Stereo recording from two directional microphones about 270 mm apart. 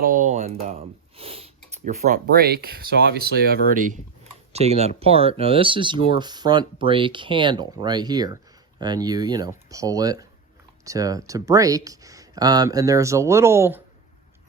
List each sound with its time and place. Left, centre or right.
0.0 s speech: right; by 13.8 s centre